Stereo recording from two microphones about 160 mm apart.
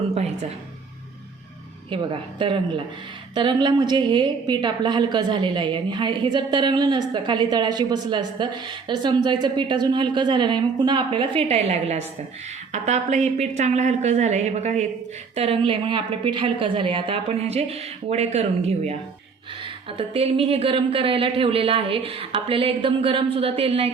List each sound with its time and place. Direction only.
1.9 s a woman's voice: 30° right (ahead or behind)